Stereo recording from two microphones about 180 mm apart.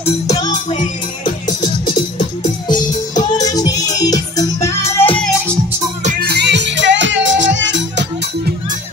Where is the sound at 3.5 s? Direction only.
20° left (ahead or behind).